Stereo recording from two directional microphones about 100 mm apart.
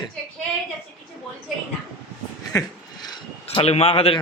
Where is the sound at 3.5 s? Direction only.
80° left.